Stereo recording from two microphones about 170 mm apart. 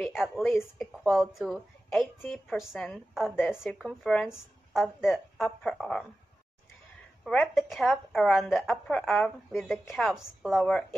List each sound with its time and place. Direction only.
0.0 s a woman's voice: centre (ahead or behind)
3.3 s a woman's voice: 10° left (ahead or behind)
3.7 s a woman's voice: centre (ahead or behind)
7.2 s a woman's voice: centre (ahead or behind)